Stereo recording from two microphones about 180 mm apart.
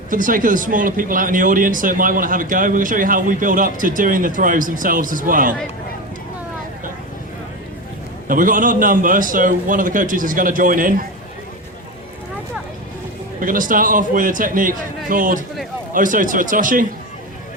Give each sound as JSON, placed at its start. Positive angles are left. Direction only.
{"t": 0.1, "sound": "speech", "side_deg": -50}
{"t": 8.3, "sound": "speech", "side_deg": -50}
{"t": 13.4, "sound": "speech", "side_deg": -50}